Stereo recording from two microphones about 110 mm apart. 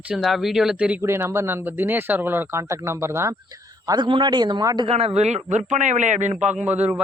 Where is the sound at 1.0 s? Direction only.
25° right (ahead or behind).